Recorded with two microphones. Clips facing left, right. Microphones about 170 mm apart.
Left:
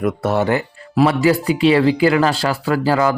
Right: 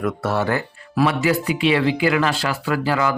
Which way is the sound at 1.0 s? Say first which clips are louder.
Left 4 dB; 35° left (ahead or behind).